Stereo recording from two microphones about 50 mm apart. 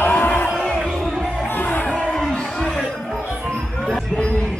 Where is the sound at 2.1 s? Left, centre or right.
Centre.